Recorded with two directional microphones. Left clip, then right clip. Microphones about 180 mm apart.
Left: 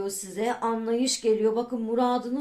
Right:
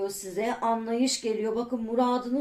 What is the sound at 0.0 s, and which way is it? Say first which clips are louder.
A woman's voice: left 1 dB; 30° left (ahead or behind).